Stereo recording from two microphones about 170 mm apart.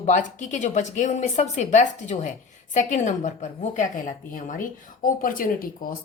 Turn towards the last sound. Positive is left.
turn(degrees=55)  # may be behind; listen again after turning